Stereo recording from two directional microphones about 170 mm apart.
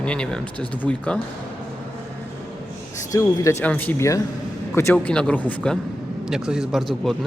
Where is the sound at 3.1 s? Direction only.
20° left (ahead or behind).